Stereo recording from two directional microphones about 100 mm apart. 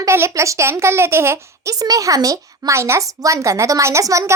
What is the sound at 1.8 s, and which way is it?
A woman's voice, 35° right (ahead or behind).